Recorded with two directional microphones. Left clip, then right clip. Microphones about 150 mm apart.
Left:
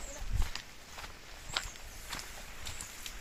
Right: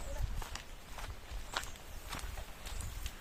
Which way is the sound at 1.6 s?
15° left (ahead or behind).